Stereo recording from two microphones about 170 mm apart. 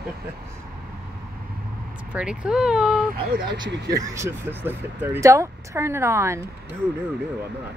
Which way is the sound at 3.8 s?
20° right (ahead or behind).